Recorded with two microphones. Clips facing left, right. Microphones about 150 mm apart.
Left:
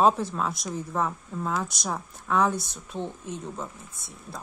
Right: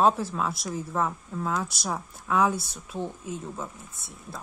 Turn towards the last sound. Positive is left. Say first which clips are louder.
# even
turn(degrees=0)  # may be behind; listen again after turning